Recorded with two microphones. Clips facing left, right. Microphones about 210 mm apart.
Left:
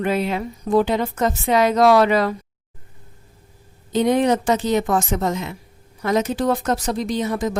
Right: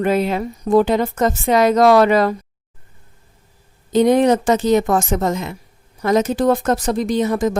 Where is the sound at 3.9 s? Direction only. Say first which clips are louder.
Right 4 dB; 45° right (ahead or behind).